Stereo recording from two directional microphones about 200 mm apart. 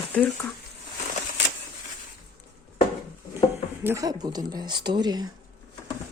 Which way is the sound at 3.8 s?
15° right (ahead or behind).